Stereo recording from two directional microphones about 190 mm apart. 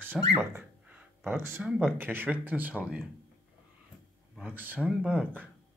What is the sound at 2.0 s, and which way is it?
Speech, 10° right (ahead or behind).